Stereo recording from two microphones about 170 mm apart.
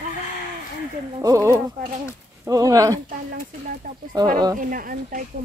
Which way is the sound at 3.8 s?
55° right (ahead or behind).